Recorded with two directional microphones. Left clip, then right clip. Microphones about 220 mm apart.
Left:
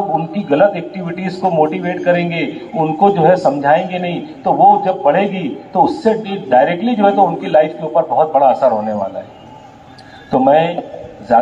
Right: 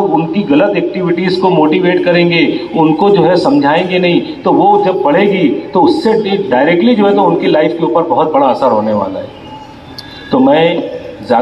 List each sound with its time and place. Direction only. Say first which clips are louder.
0.3 s a man's voice: right 2 dB; 45° left (ahead or behind)
10.3 s a man's voice: right 3 dB; 35° left (ahead or behind)